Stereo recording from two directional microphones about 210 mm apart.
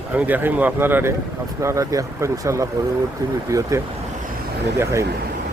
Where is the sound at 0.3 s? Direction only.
10° right (ahead or behind).